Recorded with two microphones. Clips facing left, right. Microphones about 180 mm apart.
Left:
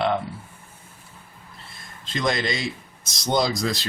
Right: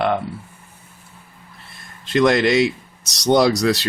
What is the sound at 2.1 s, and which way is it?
Speech, 70° right (ahead or behind).